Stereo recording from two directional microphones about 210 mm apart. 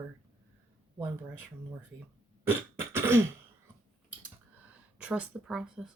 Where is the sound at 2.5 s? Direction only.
10° right (ahead or behind).